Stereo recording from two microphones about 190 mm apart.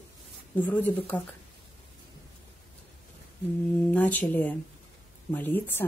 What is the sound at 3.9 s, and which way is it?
A woman's voice, 10° left (ahead or behind).